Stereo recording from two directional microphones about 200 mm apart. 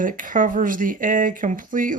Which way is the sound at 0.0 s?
40° right (ahead or behind).